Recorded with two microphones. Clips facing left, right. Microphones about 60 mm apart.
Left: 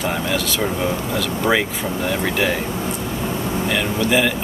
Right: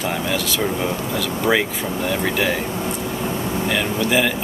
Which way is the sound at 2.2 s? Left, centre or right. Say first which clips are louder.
Left 1 dB; centre.